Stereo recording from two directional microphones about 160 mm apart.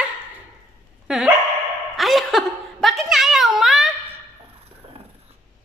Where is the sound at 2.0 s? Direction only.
Centre (ahead or behind).